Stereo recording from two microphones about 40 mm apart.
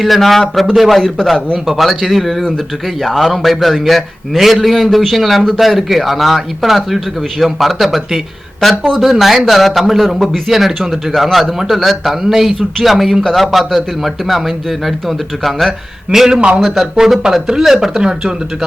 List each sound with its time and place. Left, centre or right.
0.0 s a man's voice: centre
16.0 s a man's voice: centre
18.0 s speech: centre